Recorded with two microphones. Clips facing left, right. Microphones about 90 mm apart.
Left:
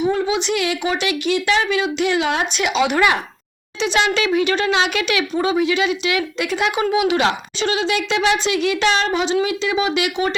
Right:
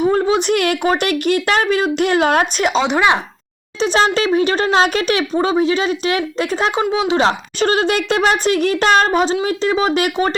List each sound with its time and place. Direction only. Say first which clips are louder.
0.0 s speech: right 4 dB; 45° right (ahead or behind)
2.8 s speech: even; 25° right (ahead or behind)
3.8 s speech: right 3 dB; 40° right (ahead or behind)